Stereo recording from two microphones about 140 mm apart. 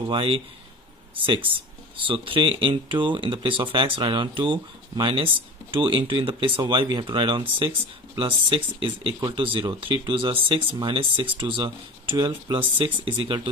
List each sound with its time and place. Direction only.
0.1 s a man's voice: 45° right (ahead or behind)